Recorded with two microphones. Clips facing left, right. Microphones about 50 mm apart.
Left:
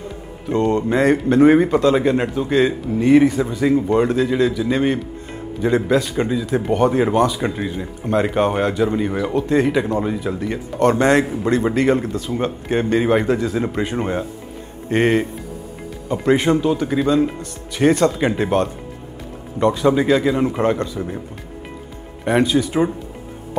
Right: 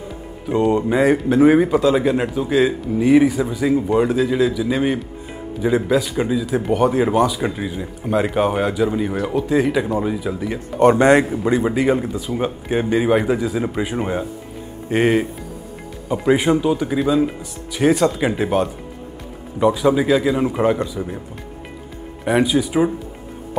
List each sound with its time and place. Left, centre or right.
0.5 s a man's voice: centre
10.8 s speech: centre
11.2 s a man's voice: centre
22.2 s speech: centre